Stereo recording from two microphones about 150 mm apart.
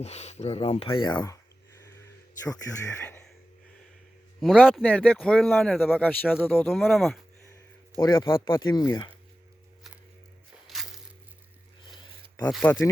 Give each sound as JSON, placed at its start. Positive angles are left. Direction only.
{"t": 0.0, "sound": "speech", "side_deg": 45}
{"t": 4.4, "sound": "a man's voice", "side_deg": 0}
{"t": 6.8, "sound": "speech", "side_deg": 0}
{"t": 7.9, "sound": "speech", "side_deg": 20}
{"t": 10.7, "sound": "crushing", "side_deg": 0}
{"t": 12.5, "sound": "speech", "side_deg": 0}